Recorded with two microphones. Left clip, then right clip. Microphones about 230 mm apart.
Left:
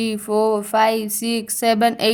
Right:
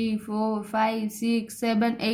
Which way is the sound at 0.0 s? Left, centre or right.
Left.